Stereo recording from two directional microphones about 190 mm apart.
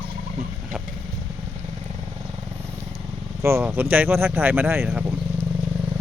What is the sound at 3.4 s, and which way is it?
Speech, 15° right (ahead or behind).